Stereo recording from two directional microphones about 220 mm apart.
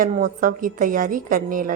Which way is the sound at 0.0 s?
40° right (ahead or behind).